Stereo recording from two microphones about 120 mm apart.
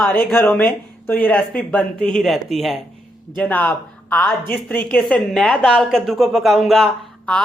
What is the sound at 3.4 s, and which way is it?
A woman's voice, 15° left (ahead or behind).